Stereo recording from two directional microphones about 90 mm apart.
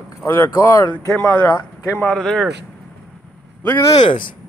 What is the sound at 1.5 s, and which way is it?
Speech, 35° left (ahead or behind).